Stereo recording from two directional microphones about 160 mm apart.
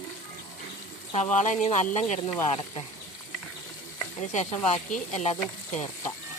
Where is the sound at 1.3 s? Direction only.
50° left (ahead or behind).